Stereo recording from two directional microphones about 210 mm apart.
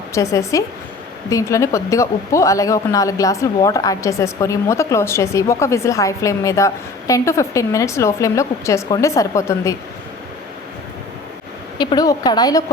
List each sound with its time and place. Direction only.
0.1 s a woman's voice: 15° left (ahead or behind)
11.8 s a woman's voice: 20° left (ahead or behind)